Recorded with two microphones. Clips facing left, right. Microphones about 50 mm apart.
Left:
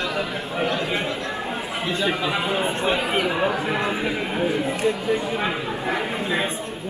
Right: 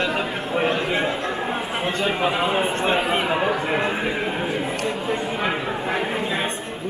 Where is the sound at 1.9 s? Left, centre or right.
Right.